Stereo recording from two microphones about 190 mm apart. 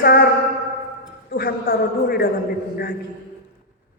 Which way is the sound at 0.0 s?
55° left (ahead or behind).